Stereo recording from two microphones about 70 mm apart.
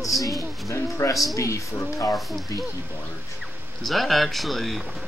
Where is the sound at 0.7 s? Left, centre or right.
Left.